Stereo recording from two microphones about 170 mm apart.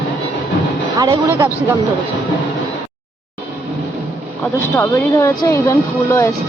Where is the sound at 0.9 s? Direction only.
25° right (ahead or behind).